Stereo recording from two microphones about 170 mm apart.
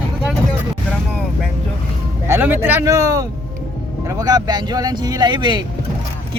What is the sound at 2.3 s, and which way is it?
Speech, 10° right (ahead or behind).